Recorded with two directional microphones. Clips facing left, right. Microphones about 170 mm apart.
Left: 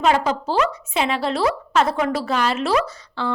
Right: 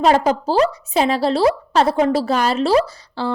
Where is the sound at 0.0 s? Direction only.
35° right (ahead or behind).